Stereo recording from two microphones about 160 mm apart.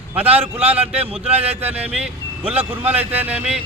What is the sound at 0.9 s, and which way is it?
Speech, 40° right (ahead or behind).